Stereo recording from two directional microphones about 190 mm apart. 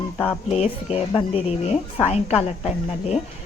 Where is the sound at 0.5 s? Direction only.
35° left (ahead or behind).